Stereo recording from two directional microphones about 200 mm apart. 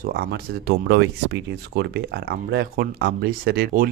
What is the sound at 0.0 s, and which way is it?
Speech, 50° right (ahead or behind).